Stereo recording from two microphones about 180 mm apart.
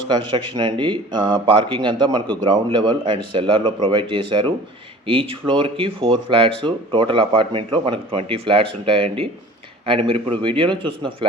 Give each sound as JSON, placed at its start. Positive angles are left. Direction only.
{"t": 0.1, "sound": "speech", "side_deg": -25}